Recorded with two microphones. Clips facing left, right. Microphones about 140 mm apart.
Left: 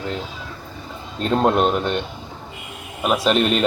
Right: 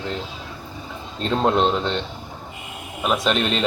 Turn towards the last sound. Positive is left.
turn(degrees=5)  # may be behind; listen again after turning